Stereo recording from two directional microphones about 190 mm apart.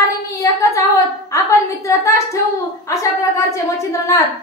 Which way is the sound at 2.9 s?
15° left (ahead or behind).